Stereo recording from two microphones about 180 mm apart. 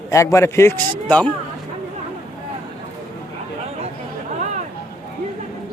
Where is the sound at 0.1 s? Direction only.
15° left (ahead or behind).